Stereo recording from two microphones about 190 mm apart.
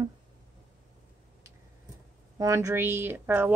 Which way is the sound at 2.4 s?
15° right (ahead or behind).